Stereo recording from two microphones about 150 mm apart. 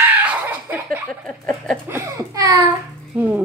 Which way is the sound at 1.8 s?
20° right (ahead or behind).